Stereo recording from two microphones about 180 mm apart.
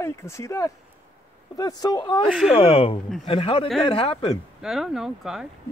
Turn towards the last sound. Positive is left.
turn(degrees=0)  # may be behind; listen again after turning